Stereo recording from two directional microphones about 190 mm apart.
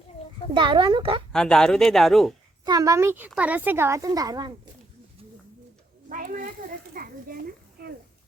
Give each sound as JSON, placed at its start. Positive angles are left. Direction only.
{"t": 0.5, "sound": "a woman's voice", "side_deg": -25}
{"t": 1.3, "sound": "speech", "side_deg": 5}
{"t": 2.6, "sound": "a child's voice", "side_deg": -20}
{"t": 6.1, "sound": "a child's voice", "side_deg": -45}